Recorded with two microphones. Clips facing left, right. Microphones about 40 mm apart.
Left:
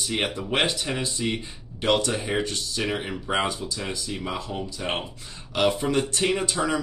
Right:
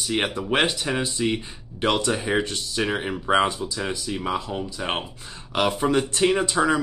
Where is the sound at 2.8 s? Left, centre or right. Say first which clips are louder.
Right 4 dB; centre.